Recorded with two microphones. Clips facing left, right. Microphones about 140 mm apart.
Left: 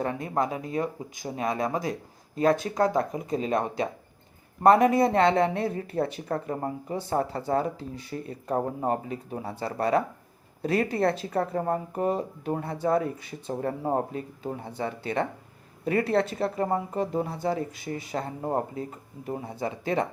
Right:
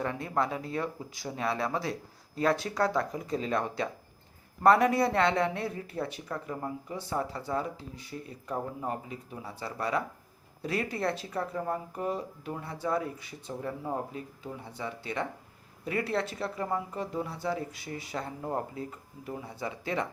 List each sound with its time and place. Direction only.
0.0 s speech: 25° left (ahead or behind)
5.6 s speech: 50° left (ahead or behind)
18.4 s speech: 30° left (ahead or behind)